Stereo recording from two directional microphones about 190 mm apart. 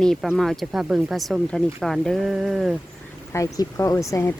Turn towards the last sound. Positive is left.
turn(degrees=15)  # may be behind; listen again after turning